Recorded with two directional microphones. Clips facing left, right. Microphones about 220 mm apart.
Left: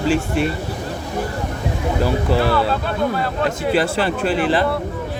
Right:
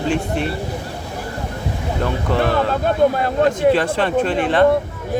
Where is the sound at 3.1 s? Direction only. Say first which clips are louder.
Right 4 dB; 45° right (ahead or behind).